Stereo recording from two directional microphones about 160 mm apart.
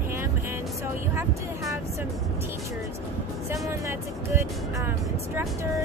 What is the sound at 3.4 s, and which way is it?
Speech, 20° right (ahead or behind).